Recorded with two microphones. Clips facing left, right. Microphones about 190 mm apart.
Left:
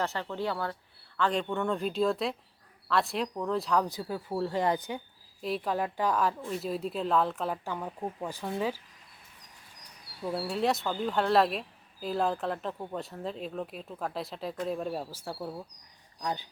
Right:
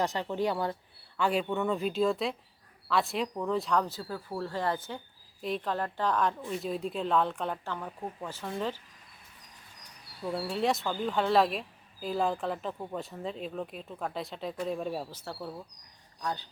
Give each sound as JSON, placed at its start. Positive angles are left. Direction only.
{"t": 0.0, "sound": "speech", "side_deg": -15}
{"t": 3.8, "sound": "speech", "side_deg": 15}
{"t": 5.4, "sound": "speech", "side_deg": 5}
{"t": 10.2, "sound": "speech", "side_deg": 5}